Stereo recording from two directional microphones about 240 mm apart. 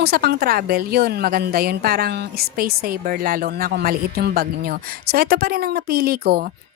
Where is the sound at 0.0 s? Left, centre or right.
Right.